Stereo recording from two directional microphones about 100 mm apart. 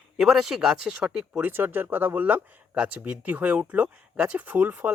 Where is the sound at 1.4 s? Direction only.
20° right (ahead or behind).